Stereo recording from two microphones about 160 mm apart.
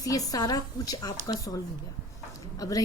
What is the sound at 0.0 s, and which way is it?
A woman's voice, 20° left (ahead or behind).